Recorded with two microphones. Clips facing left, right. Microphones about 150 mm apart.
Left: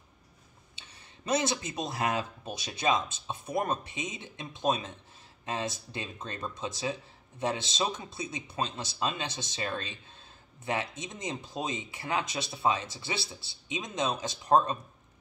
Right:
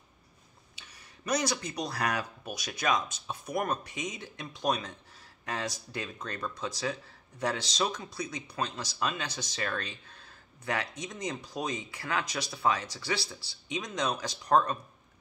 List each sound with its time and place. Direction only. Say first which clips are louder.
0.7 s speech: even; 25° left (ahead or behind)